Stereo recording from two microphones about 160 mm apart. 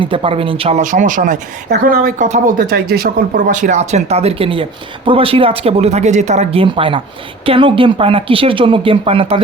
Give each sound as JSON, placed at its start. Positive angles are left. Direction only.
{"t": 0.0, "sound": "speech", "side_deg": -35}